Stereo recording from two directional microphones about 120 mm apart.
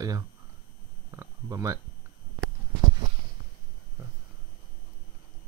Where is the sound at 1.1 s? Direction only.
25° right (ahead or behind).